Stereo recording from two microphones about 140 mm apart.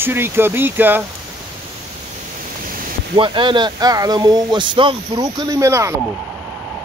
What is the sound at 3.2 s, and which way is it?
Speech, 35° right (ahead or behind).